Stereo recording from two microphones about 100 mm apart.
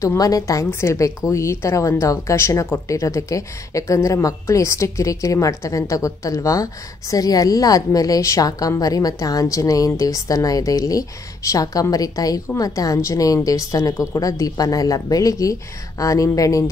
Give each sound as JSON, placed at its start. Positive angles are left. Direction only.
{"t": 0.0, "sound": "a woman's voice", "side_deg": 35}